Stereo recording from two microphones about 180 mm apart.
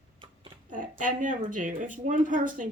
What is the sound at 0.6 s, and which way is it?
Speech, 45° right (ahead or behind).